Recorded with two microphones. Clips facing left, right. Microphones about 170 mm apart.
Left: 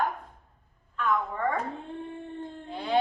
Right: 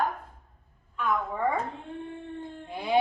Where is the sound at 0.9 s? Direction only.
10° right (ahead or behind).